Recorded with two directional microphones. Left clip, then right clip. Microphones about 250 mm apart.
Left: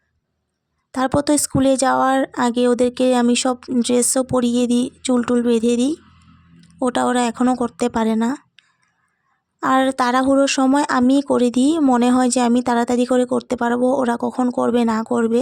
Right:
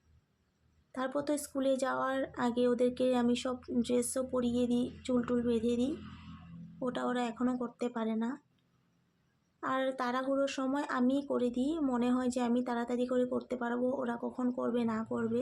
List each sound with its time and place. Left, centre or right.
0.9 s speech: left